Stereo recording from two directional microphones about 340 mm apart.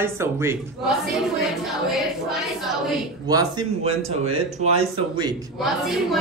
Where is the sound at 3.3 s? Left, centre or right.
Centre.